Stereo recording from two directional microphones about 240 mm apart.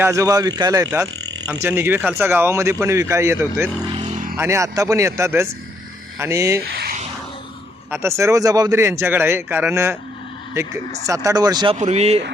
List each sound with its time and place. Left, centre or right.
0.0 s a man's voice: centre
3.9 s vehicle: right
4.4 s a man's voice: centre
7.9 s a man's voice: centre; by 12.2 s right